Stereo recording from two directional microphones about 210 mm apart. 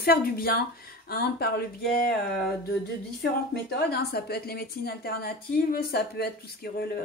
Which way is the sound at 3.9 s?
50° left (ahead or behind).